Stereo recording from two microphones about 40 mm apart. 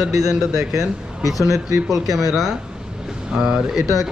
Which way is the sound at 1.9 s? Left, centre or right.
Centre.